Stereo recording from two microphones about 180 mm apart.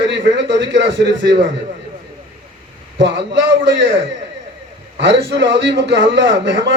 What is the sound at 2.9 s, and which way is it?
Speech, 75° right (ahead or behind).